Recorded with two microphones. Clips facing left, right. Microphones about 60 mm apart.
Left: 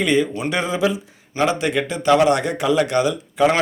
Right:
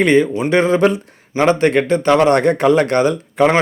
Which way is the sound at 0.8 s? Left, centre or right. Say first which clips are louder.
Right 6 dB; right.